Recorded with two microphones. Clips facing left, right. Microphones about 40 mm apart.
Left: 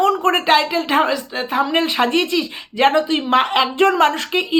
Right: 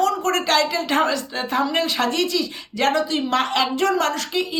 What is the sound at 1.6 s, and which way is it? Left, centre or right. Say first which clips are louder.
Speech: left 4 dB; left.